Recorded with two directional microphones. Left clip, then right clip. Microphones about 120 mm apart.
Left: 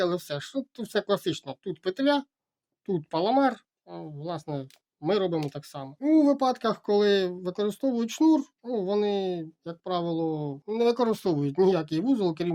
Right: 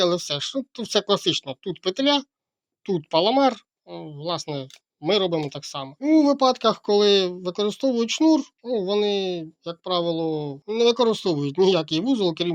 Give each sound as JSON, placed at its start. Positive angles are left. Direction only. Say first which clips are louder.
{"t": 0.0, "sound": "speech", "louder": "right 6 dB", "side_deg": -15}